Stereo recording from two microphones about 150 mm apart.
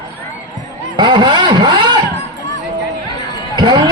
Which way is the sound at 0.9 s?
30° right (ahead or behind).